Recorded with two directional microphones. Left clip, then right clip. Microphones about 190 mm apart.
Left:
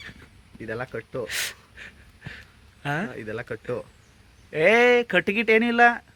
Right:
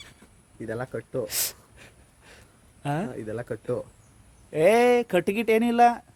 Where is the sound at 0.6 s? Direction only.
15° right (ahead or behind).